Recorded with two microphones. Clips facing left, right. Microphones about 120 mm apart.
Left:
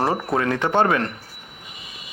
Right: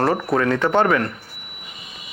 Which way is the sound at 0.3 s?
25° left (ahead or behind).